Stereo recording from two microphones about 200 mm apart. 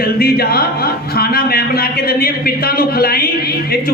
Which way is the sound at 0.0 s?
50° left (ahead or behind).